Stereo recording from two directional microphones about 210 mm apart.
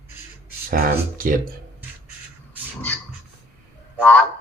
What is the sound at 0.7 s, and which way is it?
Speech, 45° right (ahead or behind).